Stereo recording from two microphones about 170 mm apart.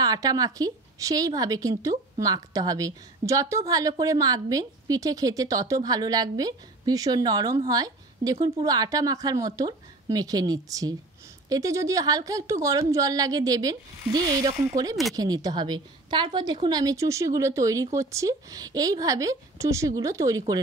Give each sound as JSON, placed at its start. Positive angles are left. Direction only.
{"t": 0.0, "sound": "a woman's voice", "side_deg": -20}